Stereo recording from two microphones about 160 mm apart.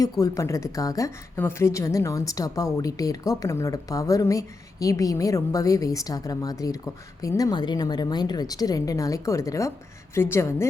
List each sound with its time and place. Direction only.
0.0 s a woman's voice: 20° left (ahead or behind)